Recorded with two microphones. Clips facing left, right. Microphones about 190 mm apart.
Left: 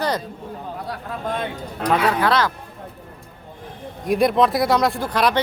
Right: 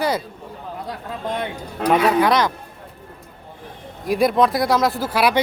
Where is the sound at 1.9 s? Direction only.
15° right (ahead or behind).